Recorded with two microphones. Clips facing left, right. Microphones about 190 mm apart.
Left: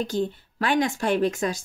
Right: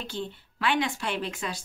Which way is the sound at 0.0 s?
40° left (ahead or behind).